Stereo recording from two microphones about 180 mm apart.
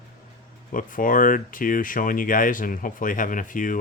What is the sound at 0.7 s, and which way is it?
Speech, 50° left (ahead or behind).